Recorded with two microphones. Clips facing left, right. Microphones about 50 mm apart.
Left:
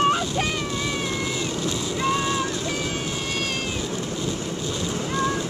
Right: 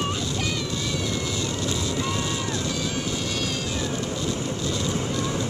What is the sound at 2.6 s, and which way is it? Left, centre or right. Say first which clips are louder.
Vehicle: left 1 dB; left.